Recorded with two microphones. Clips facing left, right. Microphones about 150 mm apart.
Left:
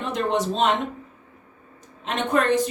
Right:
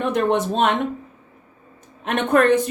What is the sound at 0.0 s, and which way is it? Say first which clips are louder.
Speech: right 4 dB; 55° right (ahead or behind).